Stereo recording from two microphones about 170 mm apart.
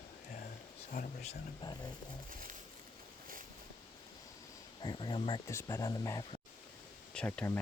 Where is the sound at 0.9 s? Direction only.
45° left (ahead or behind).